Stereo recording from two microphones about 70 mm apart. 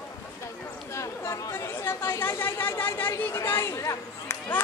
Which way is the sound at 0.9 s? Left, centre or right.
Left.